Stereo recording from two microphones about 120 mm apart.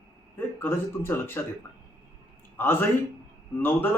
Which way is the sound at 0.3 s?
15° left (ahead or behind).